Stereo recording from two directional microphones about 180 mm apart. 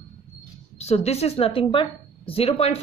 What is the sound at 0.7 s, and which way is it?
A woman's voice, 35° left (ahead or behind).